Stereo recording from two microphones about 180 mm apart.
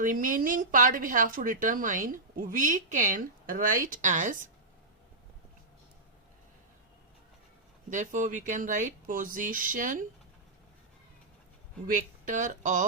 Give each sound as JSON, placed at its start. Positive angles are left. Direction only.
{"t": 0.0, "sound": "a woman's voice", "side_deg": -50}
{"t": 7.9, "sound": "a woman's voice", "side_deg": -45}
{"t": 11.9, "sound": "a woman's voice", "side_deg": -45}